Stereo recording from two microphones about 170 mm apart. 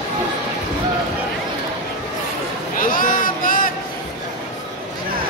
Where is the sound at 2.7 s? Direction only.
55° left (ahead or behind).